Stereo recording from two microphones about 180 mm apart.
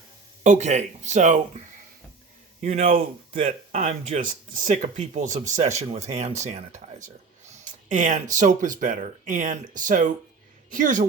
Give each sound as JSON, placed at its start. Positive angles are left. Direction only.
{"t": 0.4, "sound": "speech", "side_deg": -40}